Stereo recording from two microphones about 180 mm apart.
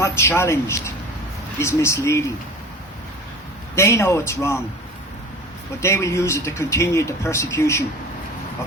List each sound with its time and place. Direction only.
0.0 s speech: 15° left (ahead or behind)
3.8 s speech: 15° left (ahead or behind)
5.8 s speech: 15° left (ahead or behind)